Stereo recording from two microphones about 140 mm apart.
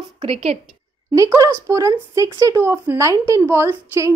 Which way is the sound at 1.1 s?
20° right (ahead or behind).